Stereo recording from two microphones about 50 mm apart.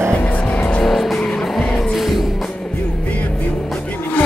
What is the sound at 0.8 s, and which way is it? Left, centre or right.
Vehicle, centre.